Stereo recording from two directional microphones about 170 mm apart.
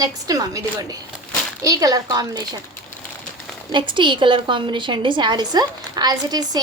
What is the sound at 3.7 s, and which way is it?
A woman's voice, 30° right (ahead or behind).